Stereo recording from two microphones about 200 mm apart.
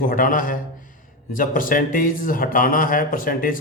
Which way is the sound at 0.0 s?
45° left (ahead or behind).